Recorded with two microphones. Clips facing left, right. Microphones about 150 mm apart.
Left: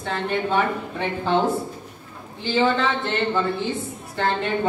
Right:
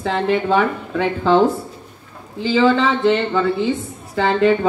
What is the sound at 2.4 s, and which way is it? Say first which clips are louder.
Speech: right 5 dB; 90° right.